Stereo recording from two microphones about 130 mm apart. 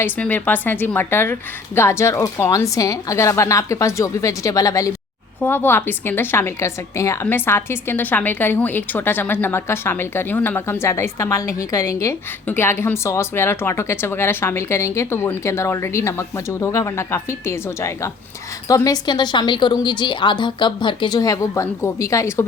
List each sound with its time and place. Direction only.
0.0 s speech: 15° left (ahead or behind)
5.4 s a woman's voice: 15° left (ahead or behind)